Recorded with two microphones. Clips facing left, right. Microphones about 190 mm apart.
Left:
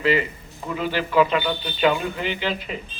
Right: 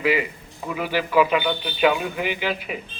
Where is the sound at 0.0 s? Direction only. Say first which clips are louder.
Left 1 dB; 10° right (ahead or behind).